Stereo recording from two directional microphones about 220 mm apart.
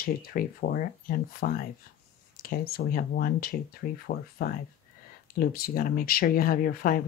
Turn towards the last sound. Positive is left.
turn(degrees=40)  # may be behind; listen again after turning